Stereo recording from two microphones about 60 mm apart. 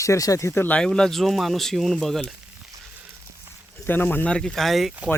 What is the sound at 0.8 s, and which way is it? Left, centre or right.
Speech, centre.